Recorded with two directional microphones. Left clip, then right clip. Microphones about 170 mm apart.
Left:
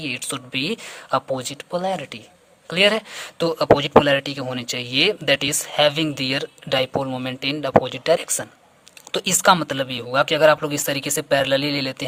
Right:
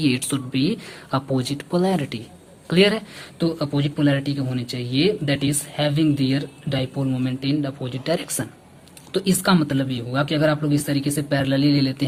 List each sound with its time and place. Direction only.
0.0 s speech: 25° left (ahead or behind)
9.1 s speech: 50° left (ahead or behind)